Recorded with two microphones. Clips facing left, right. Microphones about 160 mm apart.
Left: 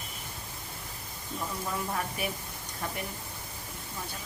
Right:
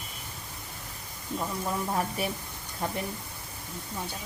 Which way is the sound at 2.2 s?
30° right (ahead or behind).